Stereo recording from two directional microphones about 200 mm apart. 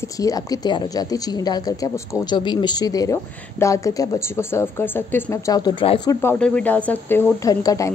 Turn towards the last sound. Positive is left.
turn(degrees=15)  # may be behind; listen again after turning